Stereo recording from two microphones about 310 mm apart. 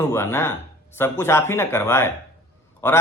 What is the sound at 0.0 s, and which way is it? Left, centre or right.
A man's voice, centre.